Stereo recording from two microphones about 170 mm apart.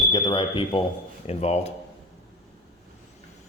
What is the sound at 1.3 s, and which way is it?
Speech, 40° left (ahead or behind).